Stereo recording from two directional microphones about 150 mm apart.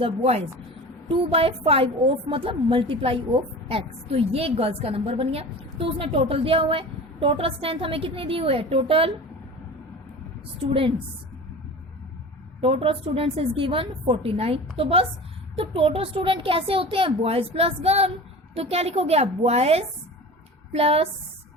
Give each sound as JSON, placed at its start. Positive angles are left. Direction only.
{"t": 0.0, "sound": "a woman's voice", "side_deg": -40}
{"t": 12.6, "sound": "a woman's voice", "side_deg": -40}